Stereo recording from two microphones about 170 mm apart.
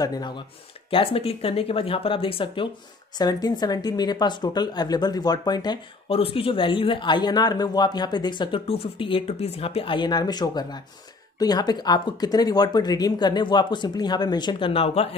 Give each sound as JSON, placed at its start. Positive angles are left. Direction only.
{"t": 0.8, "sound": "a woman's voice", "side_deg": 30}